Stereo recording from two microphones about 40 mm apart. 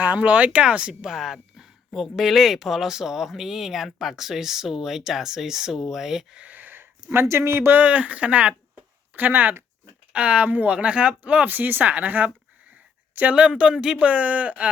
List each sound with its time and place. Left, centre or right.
0.0 s speech: right
1.0 s speech: centre
6.5 s a sound: right
6.7 s speech: right
7.8 s speech: right
9.1 s speech: right
10.1 s speech: right
11.4 s speech: right
13.3 s speech: right
14.0 s speech: right